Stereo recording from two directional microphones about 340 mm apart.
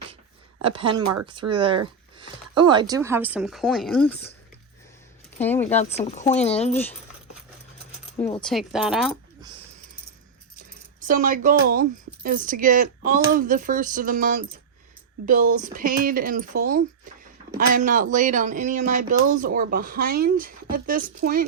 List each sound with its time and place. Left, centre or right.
0.6 s speech: centre
5.4 s speech: centre
5.9 s speech: centre
8.4 s speech: centre
11.0 s speech: right